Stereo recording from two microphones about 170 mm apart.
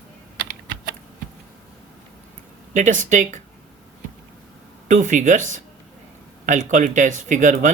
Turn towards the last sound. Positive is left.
turn(degrees=-50)  # may be behind; listen again after turning